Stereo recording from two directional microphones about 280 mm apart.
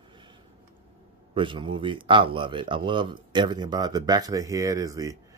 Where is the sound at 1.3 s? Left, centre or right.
Centre.